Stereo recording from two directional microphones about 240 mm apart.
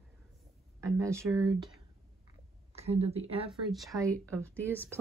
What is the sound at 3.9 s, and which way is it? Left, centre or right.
Speech, centre.